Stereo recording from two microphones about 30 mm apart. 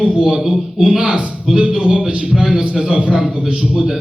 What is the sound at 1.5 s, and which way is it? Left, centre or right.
Speech, centre.